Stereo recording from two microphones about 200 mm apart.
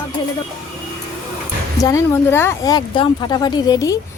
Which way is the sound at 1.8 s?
15° left (ahead or behind).